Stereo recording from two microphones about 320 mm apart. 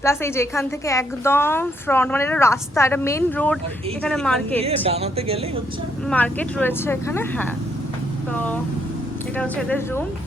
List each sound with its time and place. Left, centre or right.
0.0 s a woman's voice: centre
4.5 s speech: centre
6.1 s speech: centre